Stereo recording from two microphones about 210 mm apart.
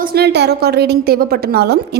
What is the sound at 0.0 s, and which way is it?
A woman's voice, 50° right (ahead or behind).